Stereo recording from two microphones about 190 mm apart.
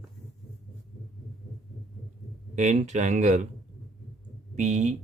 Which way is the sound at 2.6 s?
40° right (ahead or behind).